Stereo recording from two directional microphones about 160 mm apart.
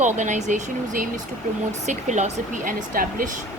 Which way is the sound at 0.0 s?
50° right (ahead or behind).